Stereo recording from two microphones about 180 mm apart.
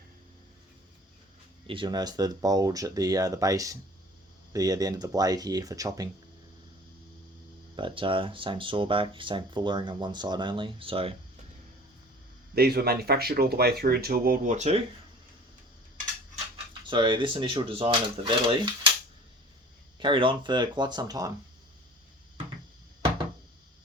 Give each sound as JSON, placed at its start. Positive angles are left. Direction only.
{"t": 1.6, "sound": "speech", "side_deg": -30}
{"t": 7.8, "sound": "speech", "side_deg": -30}
{"t": 12.5, "sound": "speech", "side_deg": -60}
{"t": 16.8, "sound": "speech", "side_deg": -25}
{"t": 20.0, "sound": "speech", "side_deg": -30}